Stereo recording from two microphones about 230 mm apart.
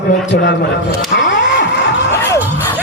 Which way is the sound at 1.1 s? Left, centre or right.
Left.